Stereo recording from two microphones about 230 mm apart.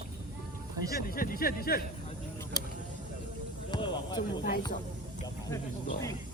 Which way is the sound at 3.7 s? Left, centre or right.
Centre.